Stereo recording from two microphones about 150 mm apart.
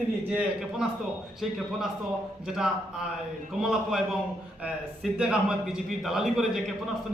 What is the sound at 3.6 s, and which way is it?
Speech, 5° right (ahead or behind).